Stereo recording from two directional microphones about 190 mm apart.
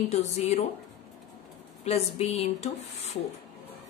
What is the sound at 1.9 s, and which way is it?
A woman's voice, 35° left (ahead or behind).